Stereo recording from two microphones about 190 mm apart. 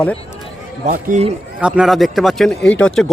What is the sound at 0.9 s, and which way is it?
Speech, 40° right (ahead or behind).